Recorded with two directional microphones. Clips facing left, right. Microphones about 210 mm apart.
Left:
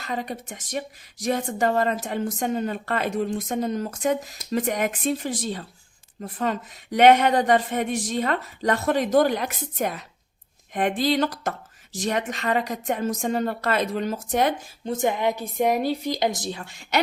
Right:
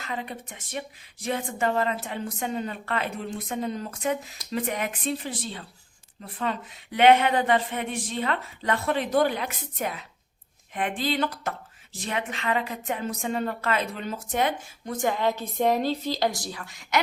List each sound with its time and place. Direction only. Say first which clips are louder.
0.0 s speech: left 4 dB; 40° left (ahead or behind)
14.8 s a woman's voice: left 2 dB; 20° left (ahead or behind)